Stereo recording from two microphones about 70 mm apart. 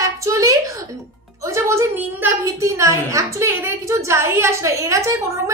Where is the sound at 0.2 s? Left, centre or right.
Right.